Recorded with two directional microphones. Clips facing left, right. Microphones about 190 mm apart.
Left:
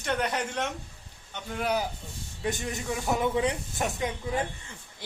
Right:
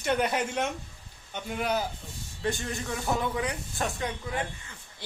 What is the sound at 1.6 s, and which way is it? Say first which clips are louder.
A man's voice: left 1 dB; 10° left (ahead or behind).